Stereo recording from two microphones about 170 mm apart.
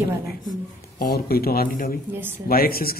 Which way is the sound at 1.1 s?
65° left (ahead or behind).